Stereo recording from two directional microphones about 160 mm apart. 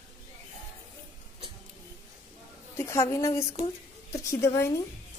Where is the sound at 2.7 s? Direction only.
20° left (ahead or behind).